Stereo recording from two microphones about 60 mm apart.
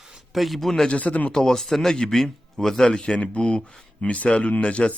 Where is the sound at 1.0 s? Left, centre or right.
Left.